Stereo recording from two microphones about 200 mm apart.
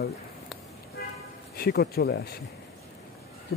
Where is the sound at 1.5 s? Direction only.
55° left (ahead or behind).